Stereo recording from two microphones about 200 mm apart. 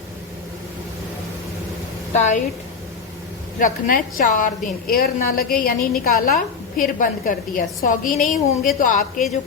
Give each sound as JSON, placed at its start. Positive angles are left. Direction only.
{"t": 2.1, "sound": "a woman's voice", "side_deg": 35}
{"t": 3.6, "sound": "a woman's voice", "side_deg": 45}